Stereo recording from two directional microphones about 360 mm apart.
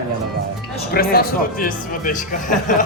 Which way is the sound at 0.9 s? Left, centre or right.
Left.